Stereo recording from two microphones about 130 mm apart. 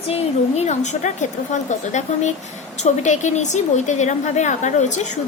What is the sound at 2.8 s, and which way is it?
A woman's voice, 65° left (ahead or behind).